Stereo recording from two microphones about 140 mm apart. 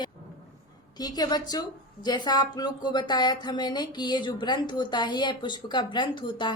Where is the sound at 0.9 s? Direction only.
30° left (ahead or behind).